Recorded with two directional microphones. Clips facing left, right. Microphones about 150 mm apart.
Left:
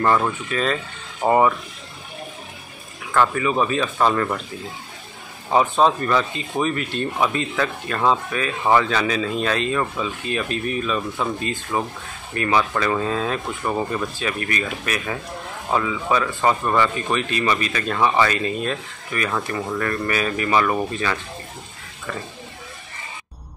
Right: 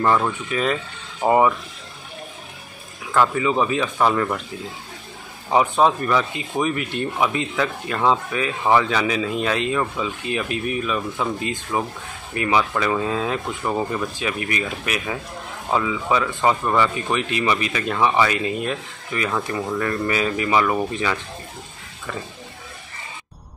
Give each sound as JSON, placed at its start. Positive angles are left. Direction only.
{"t": 0.0, "sound": "speech", "side_deg": -5}
{"t": 3.1, "sound": "speech", "side_deg": -15}
{"t": 5.5, "sound": "speech", "side_deg": -15}